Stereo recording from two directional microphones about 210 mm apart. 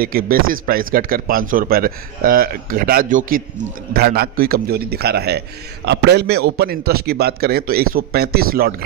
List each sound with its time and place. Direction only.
0.0 s speech: 45° right (ahead or behind)